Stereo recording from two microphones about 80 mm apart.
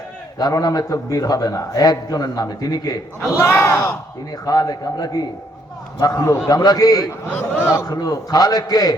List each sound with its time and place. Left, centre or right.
0.3 s a man's voice: left
3.3 s speech: left
4.4 s a man's voice: left
7.3 s a man's voice: left
7.9 s a man's voice: left